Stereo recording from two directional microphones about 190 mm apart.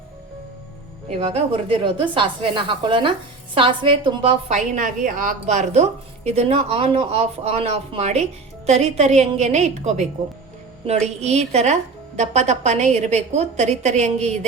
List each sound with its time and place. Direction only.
1.2 s a woman's voice: 30° right (ahead or behind)